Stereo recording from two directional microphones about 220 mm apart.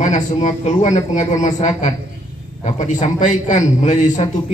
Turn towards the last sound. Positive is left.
turn(degrees=35)  # may be behind; listen again after turning